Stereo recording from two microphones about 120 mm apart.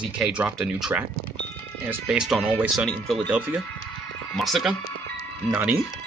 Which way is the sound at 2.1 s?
5° right (ahead or behind).